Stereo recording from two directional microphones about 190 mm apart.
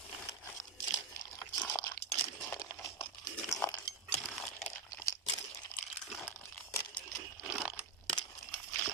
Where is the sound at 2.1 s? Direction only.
15° left (ahead or behind).